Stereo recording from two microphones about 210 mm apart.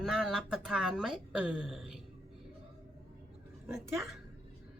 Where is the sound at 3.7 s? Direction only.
10° right (ahead or behind).